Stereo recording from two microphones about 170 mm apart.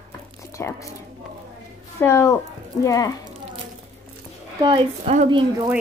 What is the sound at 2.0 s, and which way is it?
Speech, 15° left (ahead or behind).